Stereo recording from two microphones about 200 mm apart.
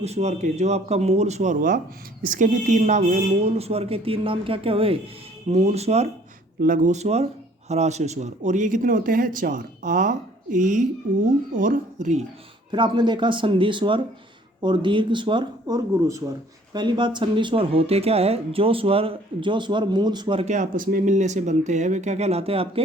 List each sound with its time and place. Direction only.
0.0 s speech: 35° right (ahead or behind)
6.6 s speech: 40° right (ahead or behind)
12.7 s speech: 25° right (ahead or behind)